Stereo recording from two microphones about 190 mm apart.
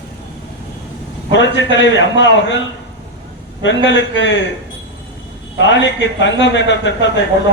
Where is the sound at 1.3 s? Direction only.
75° left (ahead or behind).